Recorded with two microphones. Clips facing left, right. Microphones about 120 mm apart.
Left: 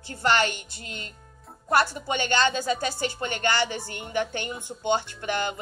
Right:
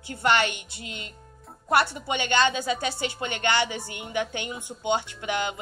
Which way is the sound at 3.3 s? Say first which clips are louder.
Right 1 dB; 15° right (ahead or behind).